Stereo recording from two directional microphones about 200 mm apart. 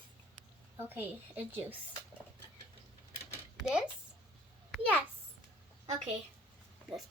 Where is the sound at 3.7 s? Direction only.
5° right (ahead or behind).